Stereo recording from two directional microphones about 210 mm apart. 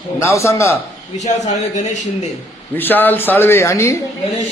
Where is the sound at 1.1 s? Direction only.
35° left (ahead or behind).